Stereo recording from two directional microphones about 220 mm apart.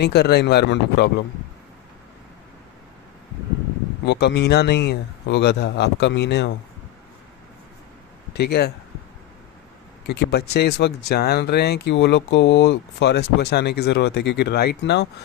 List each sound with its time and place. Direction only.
0.0 s speech: 50° left (ahead or behind)
4.0 s speech: 50° left (ahead or behind)
8.3 s speech: 45° left (ahead or behind)
10.1 s speech: 50° left (ahead or behind)